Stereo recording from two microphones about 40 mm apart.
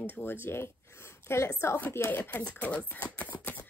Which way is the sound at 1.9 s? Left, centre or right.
Left.